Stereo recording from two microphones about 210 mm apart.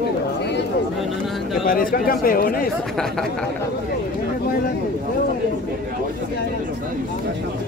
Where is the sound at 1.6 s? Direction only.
40° left (ahead or behind).